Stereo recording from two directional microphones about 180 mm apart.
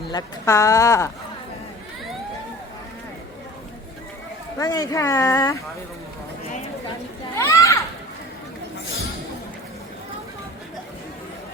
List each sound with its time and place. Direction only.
0.1 s speech: 20° left (ahead or behind)
4.5 s speech: 20° left (ahead or behind)
7.3 s a sound: 15° left (ahead or behind)